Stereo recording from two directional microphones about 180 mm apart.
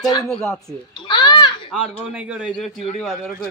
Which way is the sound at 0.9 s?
25° left (ahead or behind).